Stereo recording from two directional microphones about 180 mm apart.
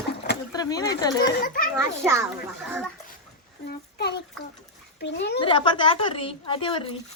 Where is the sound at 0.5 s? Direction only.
20° left (ahead or behind).